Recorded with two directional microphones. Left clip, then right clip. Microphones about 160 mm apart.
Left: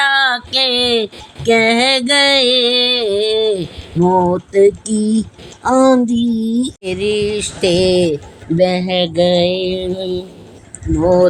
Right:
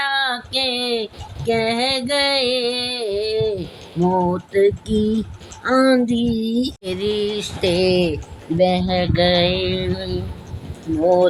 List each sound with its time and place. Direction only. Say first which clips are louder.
0.0 s female singing: left 7 dB; 50° left (ahead or behind)
5.6 s a sound: left 4 dB; 35° left (ahead or behind)
8.5 s mantra: left 3 dB; 45° left (ahead or behind)